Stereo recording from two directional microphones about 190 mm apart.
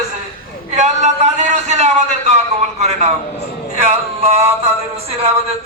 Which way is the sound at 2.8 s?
35° right (ahead or behind).